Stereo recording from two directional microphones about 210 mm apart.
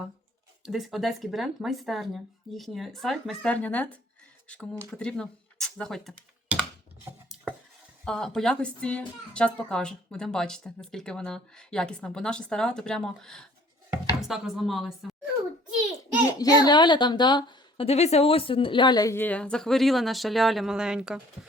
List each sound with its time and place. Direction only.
0.6 s a woman's voice: centre (ahead or behind)
8.0 s a woman's voice: 5° left (ahead or behind)
16.4 s a woman's voice: 20° left (ahead or behind); by 21.2 s 5° right (ahead or behind)